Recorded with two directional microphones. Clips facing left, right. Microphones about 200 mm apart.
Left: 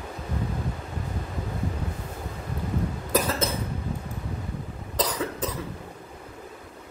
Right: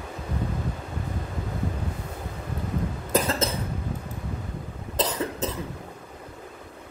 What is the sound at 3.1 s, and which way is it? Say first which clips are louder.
Cough: right 1 dB; 25° right (ahead or behind).